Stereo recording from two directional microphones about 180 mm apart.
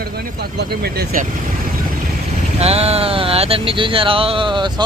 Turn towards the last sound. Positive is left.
turn(degrees=-25)  # may be behind; listen again after turning